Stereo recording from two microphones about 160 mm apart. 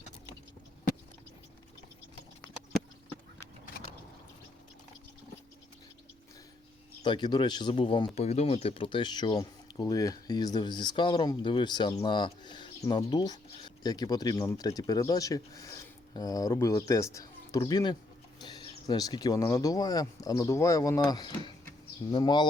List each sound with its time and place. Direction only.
7.0 s speech: 30° left (ahead or behind)